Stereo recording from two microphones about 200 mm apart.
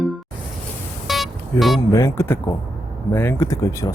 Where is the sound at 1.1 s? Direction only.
Centre (ahead or behind).